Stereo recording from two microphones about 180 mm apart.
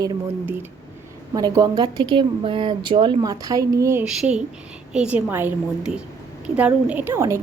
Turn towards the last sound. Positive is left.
turn(degrees=-15)  # may be behind; listen again after turning